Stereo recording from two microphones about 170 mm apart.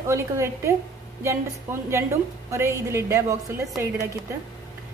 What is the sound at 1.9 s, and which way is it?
A woman's voice, 15° right (ahead or behind).